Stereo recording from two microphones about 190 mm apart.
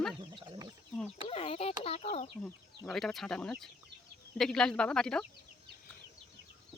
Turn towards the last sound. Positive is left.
turn(degrees=5)  # may be behind; listen again after turning